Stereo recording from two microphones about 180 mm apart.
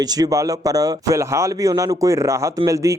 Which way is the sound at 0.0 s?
20° right (ahead or behind).